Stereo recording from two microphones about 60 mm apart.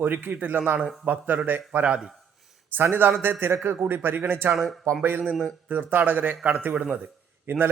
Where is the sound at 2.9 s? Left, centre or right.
Right.